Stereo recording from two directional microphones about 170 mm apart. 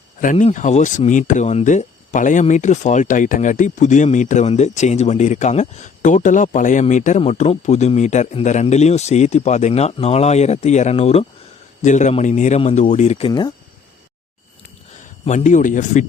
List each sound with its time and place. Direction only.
0.2 s a man's voice: 45° left (ahead or behind); by 13.5 s 30° left (ahead or behind)
15.2 s speech: 40° left (ahead or behind)